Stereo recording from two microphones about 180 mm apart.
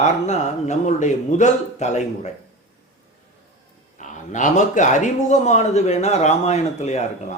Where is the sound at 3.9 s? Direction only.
45° left (ahead or behind).